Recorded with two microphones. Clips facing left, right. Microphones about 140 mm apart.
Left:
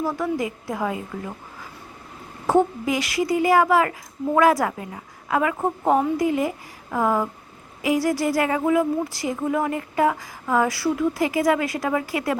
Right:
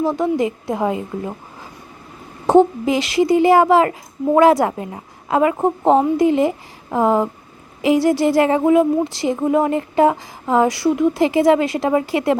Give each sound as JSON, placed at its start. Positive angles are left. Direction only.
{"t": 0.0, "sound": "speech", "side_deg": -25}
{"t": 2.5, "sound": "speech", "side_deg": -25}